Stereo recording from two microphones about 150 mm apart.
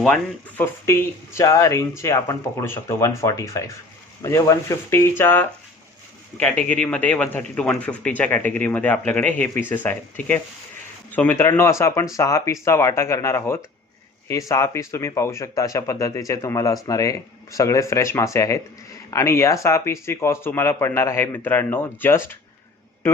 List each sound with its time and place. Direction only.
0.0 s a man's voice: 10° left (ahead or behind)